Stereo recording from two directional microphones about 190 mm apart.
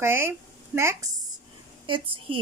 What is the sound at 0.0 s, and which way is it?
Speech, 10° right (ahead or behind).